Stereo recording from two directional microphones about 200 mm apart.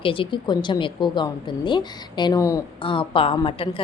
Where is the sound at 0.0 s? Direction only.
25° left (ahead or behind).